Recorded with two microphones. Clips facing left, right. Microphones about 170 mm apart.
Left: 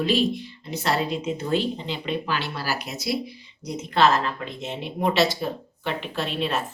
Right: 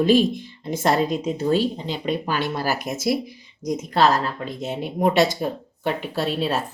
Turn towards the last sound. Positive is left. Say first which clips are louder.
# right 3 dB
turn(degrees=-35)  # may be behind; listen again after turning